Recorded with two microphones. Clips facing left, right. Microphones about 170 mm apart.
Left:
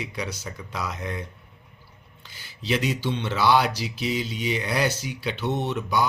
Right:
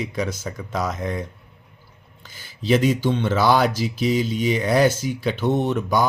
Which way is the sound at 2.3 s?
45° right (ahead or behind).